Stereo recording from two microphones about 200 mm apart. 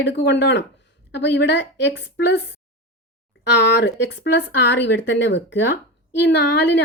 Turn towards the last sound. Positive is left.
turn(degrees=60)  # may be behind; listen again after turning